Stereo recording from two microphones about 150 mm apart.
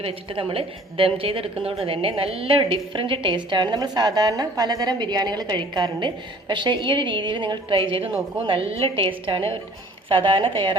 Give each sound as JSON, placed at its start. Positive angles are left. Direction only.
{"t": 0.0, "sound": "a woman's voice", "side_deg": -35}